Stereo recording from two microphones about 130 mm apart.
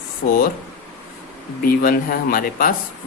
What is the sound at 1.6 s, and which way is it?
Speech, 90° left.